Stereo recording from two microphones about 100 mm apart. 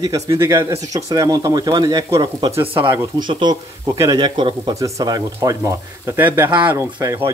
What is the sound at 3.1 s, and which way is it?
Speech, 45° right (ahead or behind).